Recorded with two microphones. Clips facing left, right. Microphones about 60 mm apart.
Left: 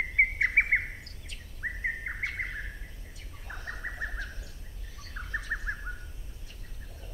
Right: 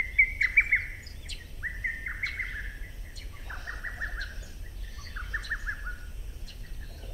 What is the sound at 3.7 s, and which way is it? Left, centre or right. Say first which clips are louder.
Bird: even; centre.